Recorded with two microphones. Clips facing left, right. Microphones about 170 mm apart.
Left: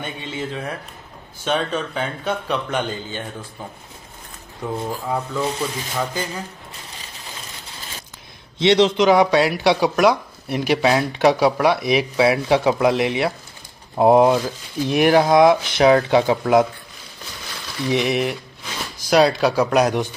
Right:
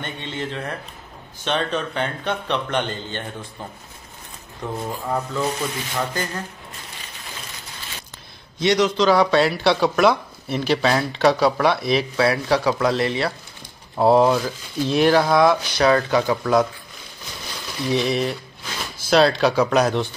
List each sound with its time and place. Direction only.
0.0 s speech: 10° left (ahead or behind)
4.8 s speech: 10° left (ahead or behind)
8.5 s speech: 25° left (ahead or behind)
17.8 s speech: 15° left (ahead or behind)